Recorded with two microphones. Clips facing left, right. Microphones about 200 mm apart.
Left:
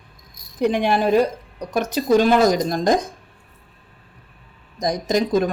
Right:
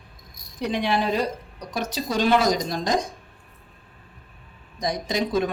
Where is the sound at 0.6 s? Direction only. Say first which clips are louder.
Left 5 dB; 50° left (ahead or behind).